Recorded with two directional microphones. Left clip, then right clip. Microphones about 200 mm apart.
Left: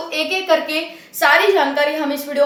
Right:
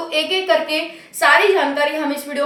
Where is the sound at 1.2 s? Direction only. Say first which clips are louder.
Even; centre (ahead or behind).